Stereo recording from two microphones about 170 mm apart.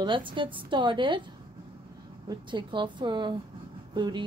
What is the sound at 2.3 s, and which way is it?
A woman's voice, 30° right (ahead or behind).